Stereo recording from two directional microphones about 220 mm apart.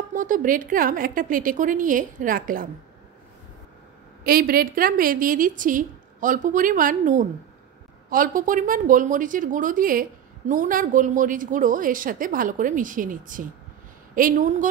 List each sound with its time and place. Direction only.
0.1 s a woman's voice: 35° right (ahead or behind)
4.2 s a woman's voice: 40° right (ahead or behind)